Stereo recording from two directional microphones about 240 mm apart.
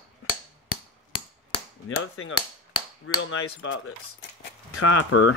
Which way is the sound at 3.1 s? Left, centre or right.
Left.